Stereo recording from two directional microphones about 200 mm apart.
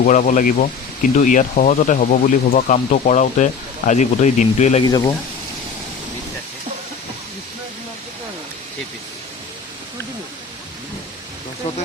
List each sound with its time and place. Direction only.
0.0 s speech: 40° left (ahead or behind)
4.9 s speech: 20° left (ahead or behind)